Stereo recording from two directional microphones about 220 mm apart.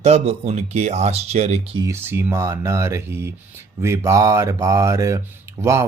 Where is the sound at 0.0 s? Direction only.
30° right (ahead or behind).